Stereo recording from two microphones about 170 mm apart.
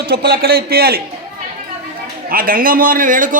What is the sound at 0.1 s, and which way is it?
Speech, 65° right (ahead or behind).